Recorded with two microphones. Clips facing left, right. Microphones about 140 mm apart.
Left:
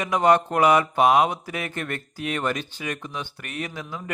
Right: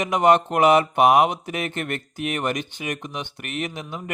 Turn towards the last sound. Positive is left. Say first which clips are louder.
# right 3 dB
turn(degrees=-20)  # may be behind; listen again after turning